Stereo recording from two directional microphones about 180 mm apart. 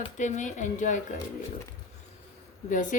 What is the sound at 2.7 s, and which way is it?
Speech, 45° left (ahead or behind).